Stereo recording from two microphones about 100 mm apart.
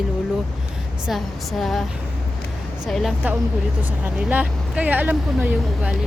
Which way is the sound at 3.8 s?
15° right (ahead or behind).